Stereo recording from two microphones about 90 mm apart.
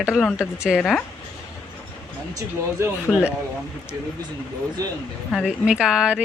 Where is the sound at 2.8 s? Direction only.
30° right (ahead or behind).